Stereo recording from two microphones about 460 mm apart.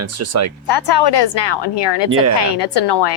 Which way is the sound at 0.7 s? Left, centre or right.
Left.